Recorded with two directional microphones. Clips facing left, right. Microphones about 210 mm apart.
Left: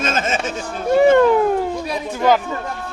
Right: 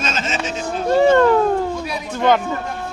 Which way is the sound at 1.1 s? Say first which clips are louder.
Even; 15° left (ahead or behind).